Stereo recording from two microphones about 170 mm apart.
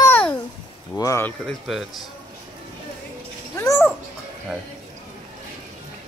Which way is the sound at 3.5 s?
15° left (ahead or behind).